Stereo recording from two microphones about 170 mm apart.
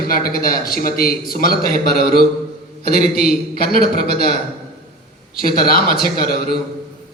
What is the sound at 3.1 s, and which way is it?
A man's voice, 60° left (ahead or behind).